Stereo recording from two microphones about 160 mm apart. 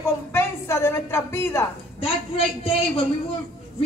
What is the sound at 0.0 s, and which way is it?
A woman's voice, 15° left (ahead or behind).